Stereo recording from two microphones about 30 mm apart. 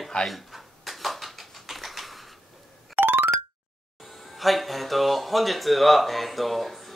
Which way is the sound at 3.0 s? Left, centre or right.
Right.